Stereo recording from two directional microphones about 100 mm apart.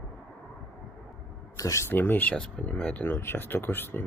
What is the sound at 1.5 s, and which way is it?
Speech, 30° left (ahead or behind).